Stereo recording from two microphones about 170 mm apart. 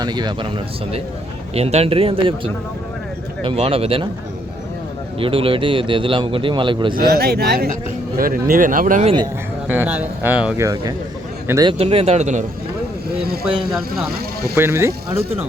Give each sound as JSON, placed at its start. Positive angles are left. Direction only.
{"t": 0.0, "sound": "speech", "side_deg": -25}
{"t": 1.5, "sound": "speech", "side_deg": -35}
{"t": 5.2, "sound": "speech", "side_deg": -30}
{"t": 6.9, "sound": "speech", "side_deg": -70}
{"t": 9.6, "sound": "speech", "side_deg": -10}
{"t": 11.4, "sound": "a man's voice", "side_deg": -20}
{"t": 11.8, "sound": "speech", "side_deg": -35}
{"t": 13.1, "sound": "vehicle", "side_deg": -65}
{"t": 14.5, "sound": "speech", "side_deg": -15}